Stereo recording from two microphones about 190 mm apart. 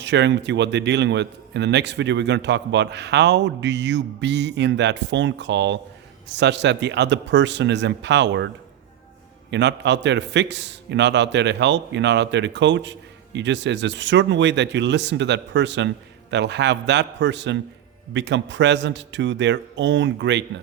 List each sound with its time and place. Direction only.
0.0 s a man's voice: 65° right (ahead or behind)
9.5 s a man's voice: 65° right (ahead or behind)